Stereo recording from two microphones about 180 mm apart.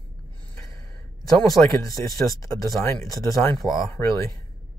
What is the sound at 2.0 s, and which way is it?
Speech, 20° left (ahead or behind).